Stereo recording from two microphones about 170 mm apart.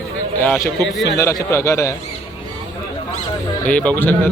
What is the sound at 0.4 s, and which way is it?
Speech, 10° left (ahead or behind).